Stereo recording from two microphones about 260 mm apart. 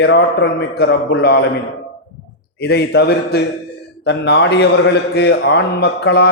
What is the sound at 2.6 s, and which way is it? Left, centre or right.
A man's voice, left.